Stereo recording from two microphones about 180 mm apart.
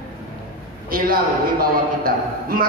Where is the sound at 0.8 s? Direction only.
55° right (ahead or behind).